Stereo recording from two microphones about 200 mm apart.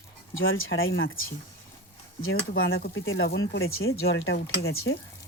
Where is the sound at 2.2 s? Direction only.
90° left.